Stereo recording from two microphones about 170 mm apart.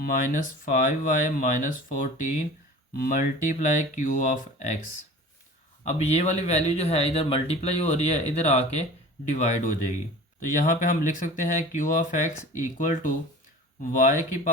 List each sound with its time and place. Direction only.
0.0 s speech: 50° left (ahead or behind)
5.8 s speech: 40° left (ahead or behind)